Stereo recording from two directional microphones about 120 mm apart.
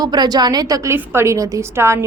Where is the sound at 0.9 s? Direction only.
20° right (ahead or behind).